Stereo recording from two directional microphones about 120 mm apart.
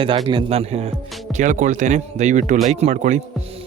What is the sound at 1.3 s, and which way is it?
Speech, 85° right.